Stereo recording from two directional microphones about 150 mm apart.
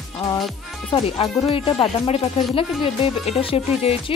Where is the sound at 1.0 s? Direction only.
40° left (ahead or behind).